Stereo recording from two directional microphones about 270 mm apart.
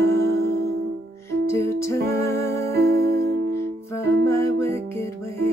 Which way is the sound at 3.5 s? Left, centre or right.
Centre.